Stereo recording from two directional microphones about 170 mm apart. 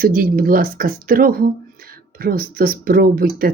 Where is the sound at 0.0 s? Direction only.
55° right (ahead or behind).